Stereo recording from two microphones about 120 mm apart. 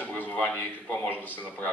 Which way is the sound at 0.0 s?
15° left (ahead or behind).